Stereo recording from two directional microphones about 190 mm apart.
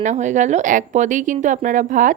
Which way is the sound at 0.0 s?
40° right (ahead or behind).